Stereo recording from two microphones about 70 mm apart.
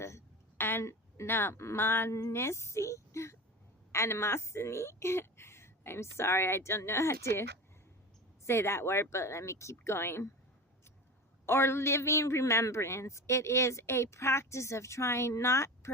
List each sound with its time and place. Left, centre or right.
0.6 s a woman's voice: left
8.4 s a man's voice: left
11.4 s a man's voice: left